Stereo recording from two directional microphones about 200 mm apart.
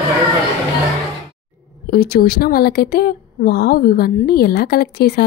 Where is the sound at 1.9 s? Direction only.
50° left (ahead or behind).